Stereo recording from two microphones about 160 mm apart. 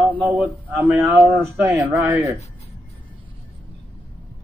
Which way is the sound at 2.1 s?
15° right (ahead or behind).